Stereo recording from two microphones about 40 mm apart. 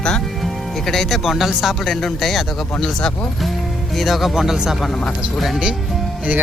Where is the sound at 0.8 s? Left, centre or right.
Centre.